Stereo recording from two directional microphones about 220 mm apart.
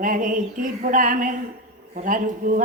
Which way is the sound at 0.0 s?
35° right (ahead or behind).